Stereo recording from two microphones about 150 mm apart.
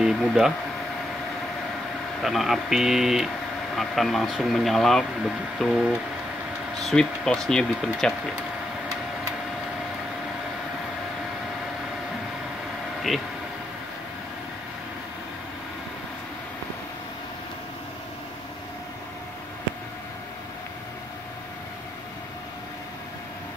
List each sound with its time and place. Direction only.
0.0 s a sound: centre (ahead or behind)
2.2 s speech: centre (ahead or behind)
13.1 s speech: centre (ahead or behind)